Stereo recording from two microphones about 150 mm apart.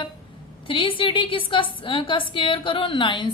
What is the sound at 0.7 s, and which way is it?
A woman's voice, 35° left (ahead or behind).